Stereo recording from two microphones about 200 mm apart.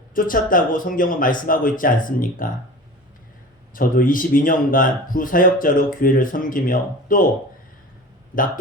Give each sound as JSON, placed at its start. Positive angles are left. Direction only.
{"t": 0.1, "sound": "speech", "side_deg": 45}
{"t": 3.8, "sound": "speech", "side_deg": 45}